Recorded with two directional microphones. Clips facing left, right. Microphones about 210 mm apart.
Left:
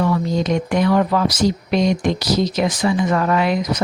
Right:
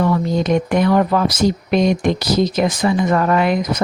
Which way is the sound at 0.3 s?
55° right (ahead or behind).